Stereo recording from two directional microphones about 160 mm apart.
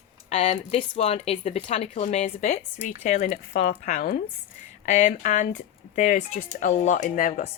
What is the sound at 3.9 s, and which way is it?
Speech, 65° left (ahead or behind).